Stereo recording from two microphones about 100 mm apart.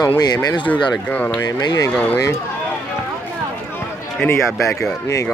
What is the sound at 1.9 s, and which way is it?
Speech, 15° left (ahead or behind).